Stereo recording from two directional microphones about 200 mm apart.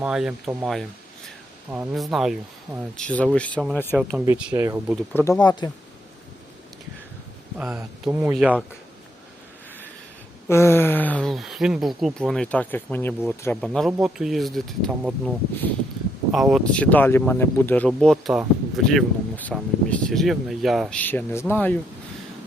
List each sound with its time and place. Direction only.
0.0 s speech: 5° right (ahead or behind)
3.9 s speech: 5° right (ahead or behind)
4.9 s speech: 5° left (ahead or behind)
5.4 s speech: 20° left (ahead or behind)
7.6 s speech: 10° right (ahead or behind)
10.5 s speech: 10° left (ahead or behind)